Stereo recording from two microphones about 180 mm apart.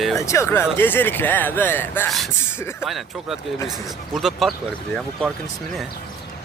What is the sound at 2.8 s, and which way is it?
Speech, centre (ahead or behind).